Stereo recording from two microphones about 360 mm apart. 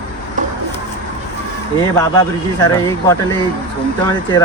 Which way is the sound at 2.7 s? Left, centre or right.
Centre.